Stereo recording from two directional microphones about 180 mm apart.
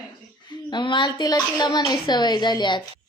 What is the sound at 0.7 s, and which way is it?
A woman's voice, 25° left (ahead or behind).